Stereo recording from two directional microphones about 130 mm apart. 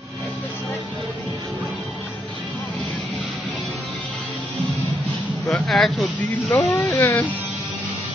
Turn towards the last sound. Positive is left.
turn(degrees=15)  # may be behind; listen again after turning